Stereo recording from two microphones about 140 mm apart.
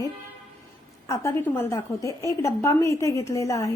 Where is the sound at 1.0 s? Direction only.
20° left (ahead or behind).